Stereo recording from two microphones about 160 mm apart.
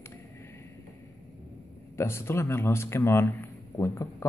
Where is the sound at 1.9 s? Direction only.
15° left (ahead or behind).